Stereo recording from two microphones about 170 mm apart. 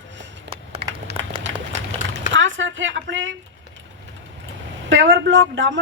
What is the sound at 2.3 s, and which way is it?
Speech, 90° right.